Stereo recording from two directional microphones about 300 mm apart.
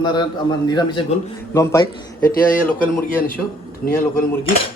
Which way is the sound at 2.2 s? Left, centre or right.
Left.